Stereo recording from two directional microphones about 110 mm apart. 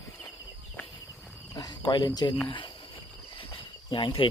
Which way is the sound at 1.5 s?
35° left (ahead or behind).